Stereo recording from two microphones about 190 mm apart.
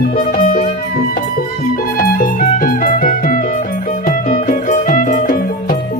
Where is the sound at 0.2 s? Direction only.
45° left (ahead or behind).